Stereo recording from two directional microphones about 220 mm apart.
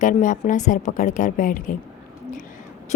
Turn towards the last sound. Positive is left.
turn(degrees=30)  # may be behind; listen again after turning